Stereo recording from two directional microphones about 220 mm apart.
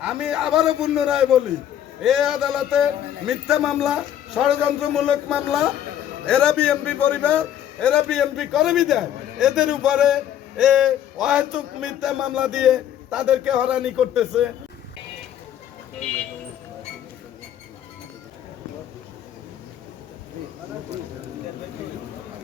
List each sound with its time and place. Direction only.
0.0 s a man's voice: 5° right (ahead or behind)